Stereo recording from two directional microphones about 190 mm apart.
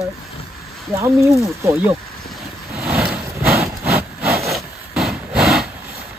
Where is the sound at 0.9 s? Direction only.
15° right (ahead or behind).